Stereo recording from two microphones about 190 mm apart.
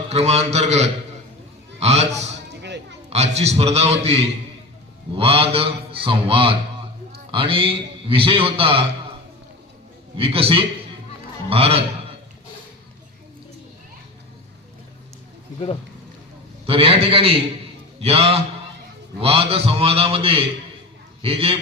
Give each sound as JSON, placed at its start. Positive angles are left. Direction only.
{"t": 0.1, "sound": "a man's voice", "side_deg": -35}
{"t": 2.6, "sound": "children playing", "side_deg": -65}
{"t": 3.1, "sound": "a man's voice", "side_deg": -35}
{"t": 10.2, "sound": "a man's voice", "side_deg": -30}
{"t": 16.6, "sound": "a man's voice", "side_deg": -30}